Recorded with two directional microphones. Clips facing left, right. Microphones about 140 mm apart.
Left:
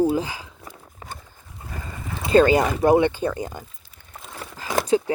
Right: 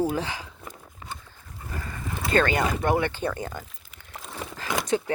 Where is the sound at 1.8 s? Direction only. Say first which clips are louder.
Left 1 dB; 20° left (ahead or behind).